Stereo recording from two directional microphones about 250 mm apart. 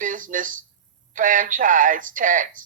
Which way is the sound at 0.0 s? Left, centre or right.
Right.